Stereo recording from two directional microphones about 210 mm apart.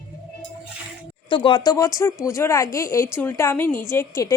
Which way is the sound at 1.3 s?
20° left (ahead or behind).